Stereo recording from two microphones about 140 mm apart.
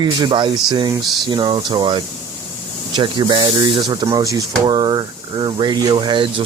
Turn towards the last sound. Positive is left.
turn(degrees=-35)  # may be behind; listen again after turning